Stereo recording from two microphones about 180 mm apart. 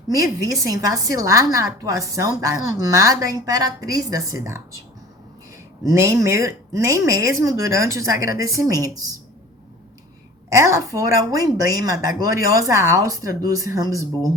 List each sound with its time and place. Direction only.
0.4 s a woman's voice: 20° right (ahead or behind)
5.8 s a woman's voice: 15° right (ahead or behind)
10.6 s a woman's voice: 20° right (ahead or behind)